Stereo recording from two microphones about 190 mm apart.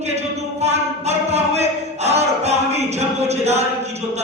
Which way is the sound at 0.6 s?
35° right (ahead or behind).